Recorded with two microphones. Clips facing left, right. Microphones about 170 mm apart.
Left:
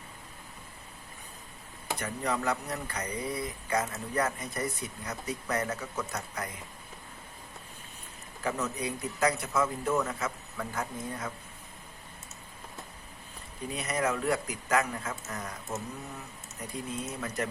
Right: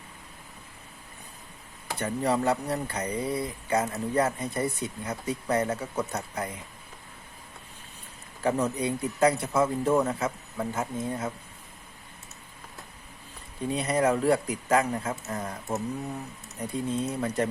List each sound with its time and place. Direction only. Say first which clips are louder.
2.0 s speech: right 7 dB; 30° right (ahead or behind)
8.4 s speech: right 6 dB; 30° right (ahead or behind)
13.7 s speech: right 6 dB; 30° right (ahead or behind)
16.9 s speech: right 7 dB; 30° right (ahead or behind)